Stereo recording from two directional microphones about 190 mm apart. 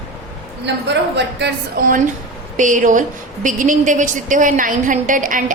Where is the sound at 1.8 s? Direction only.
50° right (ahead or behind).